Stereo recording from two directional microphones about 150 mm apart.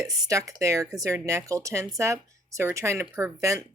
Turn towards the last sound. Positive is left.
turn(degrees=-20)  # may be behind; listen again after turning